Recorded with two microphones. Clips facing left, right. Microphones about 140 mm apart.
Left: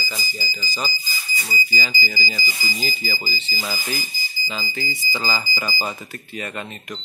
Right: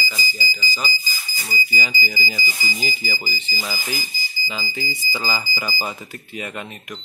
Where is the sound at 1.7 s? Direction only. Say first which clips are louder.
Even; 15° right (ahead or behind).